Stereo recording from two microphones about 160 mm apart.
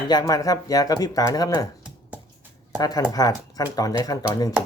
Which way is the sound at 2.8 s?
25° left (ahead or behind).